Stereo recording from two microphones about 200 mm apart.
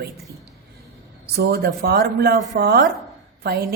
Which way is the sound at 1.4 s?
50° right (ahead or behind).